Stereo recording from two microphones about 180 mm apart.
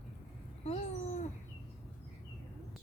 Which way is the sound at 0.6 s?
40° left (ahead or behind).